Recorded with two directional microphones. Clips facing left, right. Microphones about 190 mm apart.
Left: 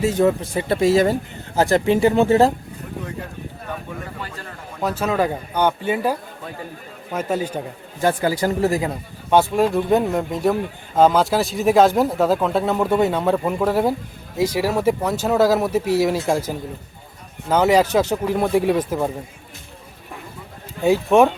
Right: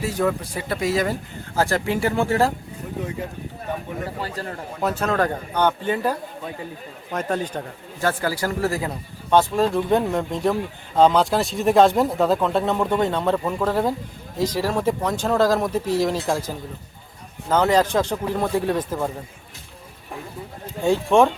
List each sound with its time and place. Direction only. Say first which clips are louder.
0.0 s speech: left 5 dB; 25° left (ahead or behind)
4.2 s a man's voice: right 4 dB; 35° right (ahead or behind)
4.8 s speech: left 1 dB; centre (ahead or behind)
8.0 s speech: left 4 dB; 20° left (ahead or behind)
17.5 s speech: left 2 dB; 10° left (ahead or behind)
20.8 s speech: left 2 dB; 10° left (ahead or behind)